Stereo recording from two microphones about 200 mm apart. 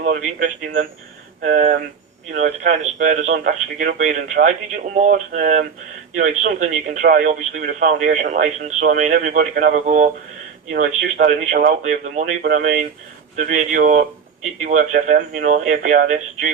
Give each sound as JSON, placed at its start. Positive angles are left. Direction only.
{"t": 0.0, "sound": "speech", "side_deg": -40}